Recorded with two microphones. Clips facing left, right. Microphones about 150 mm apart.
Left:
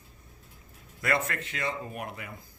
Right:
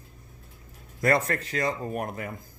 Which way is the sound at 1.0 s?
35° right (ahead or behind).